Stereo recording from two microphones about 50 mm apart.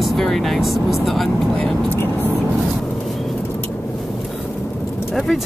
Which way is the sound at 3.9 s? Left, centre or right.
Centre.